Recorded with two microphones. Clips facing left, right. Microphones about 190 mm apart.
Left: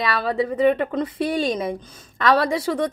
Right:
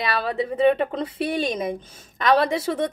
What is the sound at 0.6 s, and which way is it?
Speech, 25° right (ahead or behind).